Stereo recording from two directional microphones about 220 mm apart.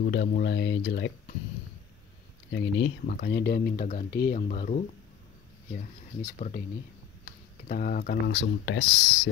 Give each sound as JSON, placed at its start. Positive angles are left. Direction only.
{"t": 0.0, "sound": "speech", "side_deg": 45}
{"t": 2.5, "sound": "speech", "side_deg": 50}
{"t": 4.1, "sound": "speech", "side_deg": 45}
{"t": 4.4, "sound": "speech", "side_deg": 35}
{"t": 6.3, "sound": "speech", "side_deg": 35}
{"t": 7.6, "sound": "speech", "side_deg": 35}
{"t": 8.3, "sound": "speech", "side_deg": 55}